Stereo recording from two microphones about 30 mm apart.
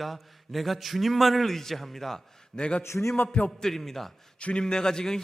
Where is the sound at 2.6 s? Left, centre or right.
Left.